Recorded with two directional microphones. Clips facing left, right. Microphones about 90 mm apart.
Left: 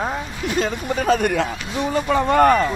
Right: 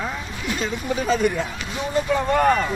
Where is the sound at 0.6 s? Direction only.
50° left (ahead or behind); by 2.5 s 70° left (ahead or behind).